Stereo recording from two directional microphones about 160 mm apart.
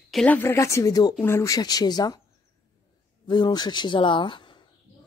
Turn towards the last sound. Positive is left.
turn(degrees=30)  # may be behind; listen again after turning